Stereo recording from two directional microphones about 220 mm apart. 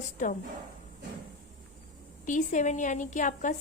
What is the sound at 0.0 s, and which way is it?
Speech, 35° left (ahead or behind).